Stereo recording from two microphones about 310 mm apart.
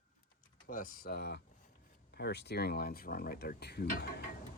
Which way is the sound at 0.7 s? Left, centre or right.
Left.